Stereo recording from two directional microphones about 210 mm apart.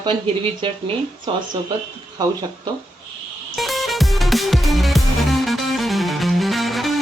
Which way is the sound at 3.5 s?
Centre (ahead or behind).